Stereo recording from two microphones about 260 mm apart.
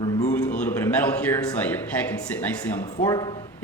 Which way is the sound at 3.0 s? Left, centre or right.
Centre.